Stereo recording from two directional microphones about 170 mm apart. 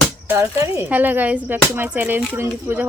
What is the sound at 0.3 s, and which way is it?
Speech, 15° right (ahead or behind).